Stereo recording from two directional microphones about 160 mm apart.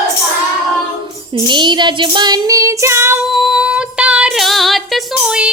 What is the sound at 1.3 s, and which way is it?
Music, 30° right (ahead or behind).